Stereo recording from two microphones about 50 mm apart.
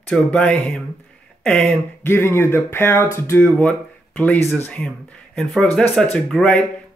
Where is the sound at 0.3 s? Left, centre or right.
Left.